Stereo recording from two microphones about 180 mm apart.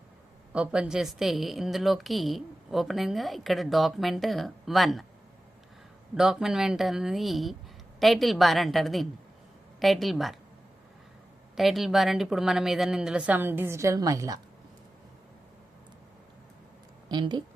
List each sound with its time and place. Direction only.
0.5 s a woman's voice: 5° right (ahead or behind)
6.1 s a woman's voice: 5° right (ahead or behind)
11.5 s a woman's voice: centre (ahead or behind); by 14.4 s 20° right (ahead or behind)
17.1 s speech: 25° right (ahead or behind)